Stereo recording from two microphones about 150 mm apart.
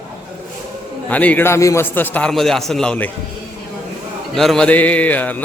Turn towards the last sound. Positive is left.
turn(degrees=10)  # may be behind; listen again after turning